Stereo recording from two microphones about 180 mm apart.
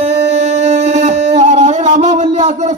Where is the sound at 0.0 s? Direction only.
40° right (ahead or behind).